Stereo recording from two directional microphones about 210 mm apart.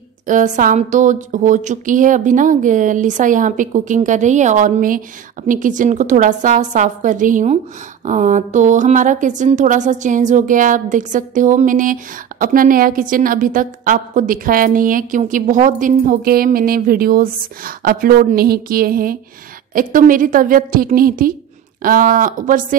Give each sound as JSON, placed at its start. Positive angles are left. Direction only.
{"t": 0.3, "sound": "a woman's voice", "side_deg": -40}